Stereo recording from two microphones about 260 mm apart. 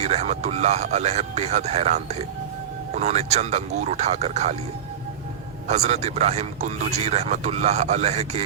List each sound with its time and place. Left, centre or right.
0.0 s a man's voice: right
5.6 s a man's voice: right